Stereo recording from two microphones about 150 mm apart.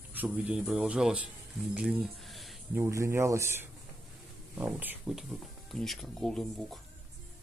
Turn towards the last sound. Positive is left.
turn(degrees=0)  # may be behind; listen again after turning